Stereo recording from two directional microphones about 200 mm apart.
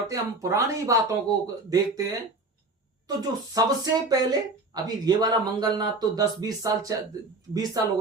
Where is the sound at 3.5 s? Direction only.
20° right (ahead or behind).